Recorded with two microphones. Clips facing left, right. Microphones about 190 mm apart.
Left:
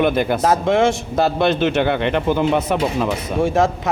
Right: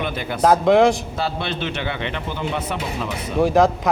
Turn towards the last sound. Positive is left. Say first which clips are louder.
# right 1 dB
turn(degrees=0)  # may be behind; listen again after turning